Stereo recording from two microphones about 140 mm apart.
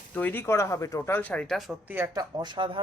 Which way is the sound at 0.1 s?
15° left (ahead or behind).